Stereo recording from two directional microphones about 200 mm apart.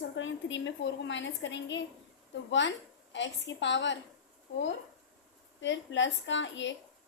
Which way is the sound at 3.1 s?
65° left (ahead or behind).